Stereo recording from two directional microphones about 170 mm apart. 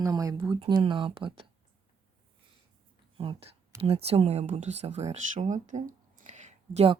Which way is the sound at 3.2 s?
30° right (ahead or behind).